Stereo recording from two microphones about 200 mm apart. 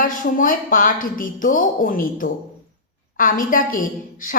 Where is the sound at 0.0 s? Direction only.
45° left (ahead or behind).